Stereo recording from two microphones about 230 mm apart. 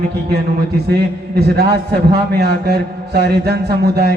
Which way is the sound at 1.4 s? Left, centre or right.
Right.